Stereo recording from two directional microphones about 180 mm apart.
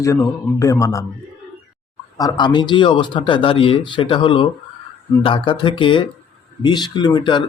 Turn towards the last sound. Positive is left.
turn(degrees=25)  # may be behind; listen again after turning